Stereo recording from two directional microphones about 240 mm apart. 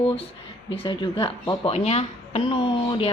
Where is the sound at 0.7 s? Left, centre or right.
Left.